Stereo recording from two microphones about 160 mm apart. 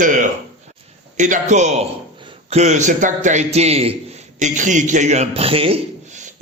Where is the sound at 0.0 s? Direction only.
55° right (ahead or behind).